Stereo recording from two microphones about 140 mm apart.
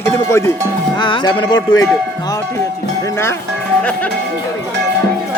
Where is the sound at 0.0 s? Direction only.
20° left (ahead or behind).